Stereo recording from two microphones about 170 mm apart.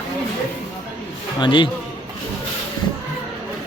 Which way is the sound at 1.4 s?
30° left (ahead or behind).